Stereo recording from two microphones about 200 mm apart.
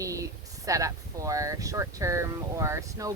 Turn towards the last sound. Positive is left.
turn(degrees=-15)  # may be behind; listen again after turning